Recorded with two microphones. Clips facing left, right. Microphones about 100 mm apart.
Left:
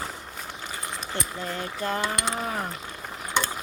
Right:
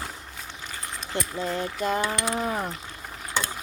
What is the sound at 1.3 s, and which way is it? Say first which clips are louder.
Speech: right 3 dB; 10° right (ahead or behind).